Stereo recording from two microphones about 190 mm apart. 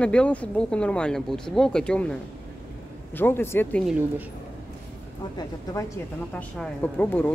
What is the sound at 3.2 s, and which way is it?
Speech, 10° left (ahead or behind).